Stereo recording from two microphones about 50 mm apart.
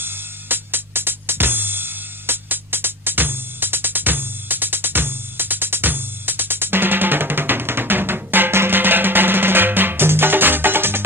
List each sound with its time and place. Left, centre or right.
0.0 s music: right